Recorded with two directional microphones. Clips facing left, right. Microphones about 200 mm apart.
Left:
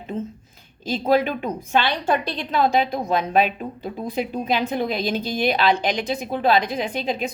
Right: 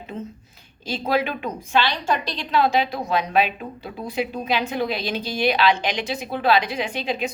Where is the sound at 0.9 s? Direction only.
40° left (ahead or behind).